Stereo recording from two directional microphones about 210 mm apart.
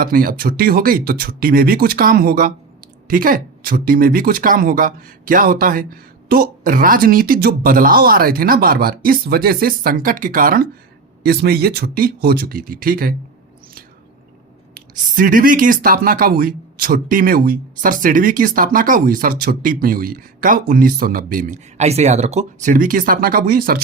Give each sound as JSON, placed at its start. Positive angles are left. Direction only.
{"t": 0.0, "sound": "speech", "side_deg": -40}
{"t": 14.8, "sound": "speech", "side_deg": -40}